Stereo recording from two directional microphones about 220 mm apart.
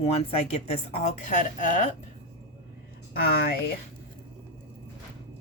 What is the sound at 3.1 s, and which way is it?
Speech, 45° left (ahead or behind).